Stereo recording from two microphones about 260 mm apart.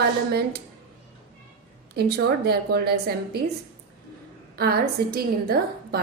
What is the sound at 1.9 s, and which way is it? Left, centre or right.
A woman's voice, right.